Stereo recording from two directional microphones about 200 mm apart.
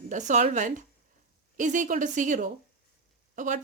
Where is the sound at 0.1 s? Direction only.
35° right (ahead or behind).